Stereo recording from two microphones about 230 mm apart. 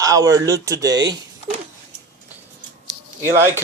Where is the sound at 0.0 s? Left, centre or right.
Centre.